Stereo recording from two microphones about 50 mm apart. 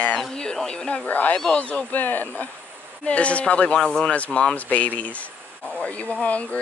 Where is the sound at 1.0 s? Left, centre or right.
Left.